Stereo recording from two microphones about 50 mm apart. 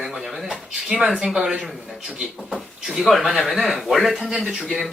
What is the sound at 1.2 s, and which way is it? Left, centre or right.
Speech, centre.